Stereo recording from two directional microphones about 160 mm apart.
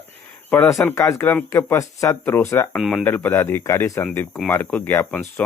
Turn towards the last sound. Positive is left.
turn(degrees=10)  # may be behind; listen again after turning